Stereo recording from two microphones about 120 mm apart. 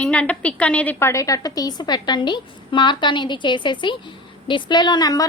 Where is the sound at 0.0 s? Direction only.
10° left (ahead or behind).